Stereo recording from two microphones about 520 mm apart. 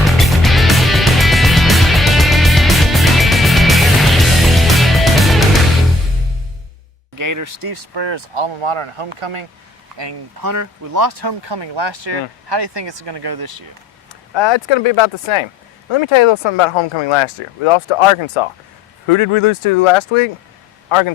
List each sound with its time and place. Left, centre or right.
0.0 s music: centre
7.2 s speech: right
10.0 s speech: right
10.5 s speech: right
14.3 s speech: left